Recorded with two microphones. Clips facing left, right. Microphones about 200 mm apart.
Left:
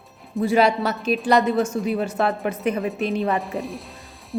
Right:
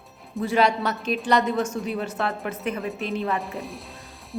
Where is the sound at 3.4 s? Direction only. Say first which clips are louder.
Left 5 dB; centre (ahead or behind).